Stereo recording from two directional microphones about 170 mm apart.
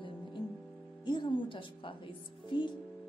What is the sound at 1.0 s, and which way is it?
Speech, 25° left (ahead or behind).